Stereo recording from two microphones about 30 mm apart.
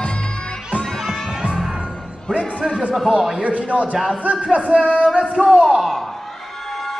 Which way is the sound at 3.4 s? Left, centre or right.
Right.